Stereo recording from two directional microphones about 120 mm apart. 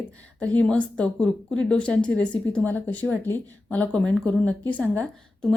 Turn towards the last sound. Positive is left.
turn(degrees=10)  # may be behind; listen again after turning